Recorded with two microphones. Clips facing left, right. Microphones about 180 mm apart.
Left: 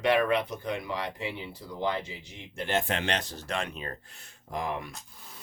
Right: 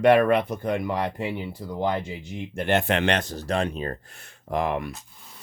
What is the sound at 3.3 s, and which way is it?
Speech, 35° right (ahead or behind).